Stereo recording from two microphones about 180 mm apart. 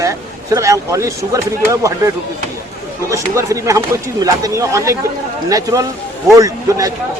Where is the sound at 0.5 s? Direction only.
15° right (ahead or behind).